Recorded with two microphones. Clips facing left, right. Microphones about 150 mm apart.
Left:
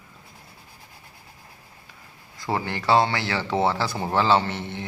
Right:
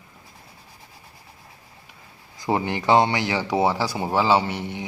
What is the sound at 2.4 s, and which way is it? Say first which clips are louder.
Speech: right 4 dB; 15° right (ahead or behind).